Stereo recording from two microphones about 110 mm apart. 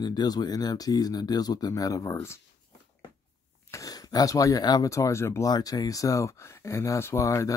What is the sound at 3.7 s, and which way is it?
Speech, 30° left (ahead or behind).